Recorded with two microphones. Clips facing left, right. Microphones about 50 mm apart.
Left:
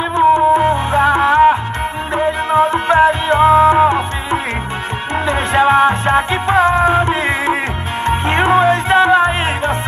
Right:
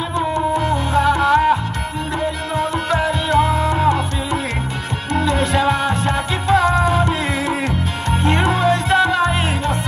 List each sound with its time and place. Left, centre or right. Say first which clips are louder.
0.1 s music: left 10 dB; left